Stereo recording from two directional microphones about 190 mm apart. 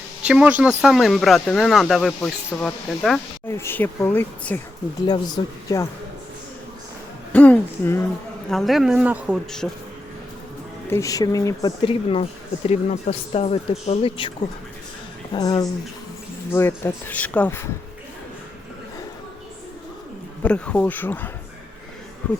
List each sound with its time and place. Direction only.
0.2 s speech: 5° right (ahead or behind); by 4.6 s 10° left (ahead or behind)
5.0 s a woman's voice: 20° left (ahead or behind)
7.3 s speech: 5° left (ahead or behind)
10.8 s a man's voice: 15° left (ahead or behind)
20.4 s speech: 5° left (ahead or behind)